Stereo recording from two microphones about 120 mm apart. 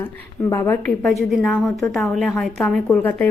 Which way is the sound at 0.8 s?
5° left (ahead or behind).